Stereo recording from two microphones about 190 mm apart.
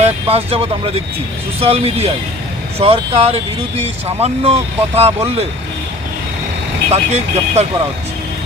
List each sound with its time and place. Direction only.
0.0 s speech: 30° right (ahead or behind)
6.9 s speech: 35° right (ahead or behind)